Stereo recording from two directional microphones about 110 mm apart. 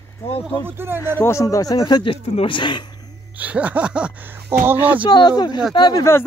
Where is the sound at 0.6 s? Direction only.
20° right (ahead or behind).